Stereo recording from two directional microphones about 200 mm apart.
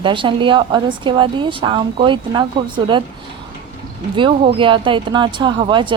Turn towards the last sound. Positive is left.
turn(degrees=-25)  # may be behind; listen again after turning